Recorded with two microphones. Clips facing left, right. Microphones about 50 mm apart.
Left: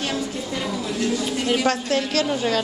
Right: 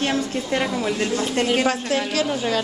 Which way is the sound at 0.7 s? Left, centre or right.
Right.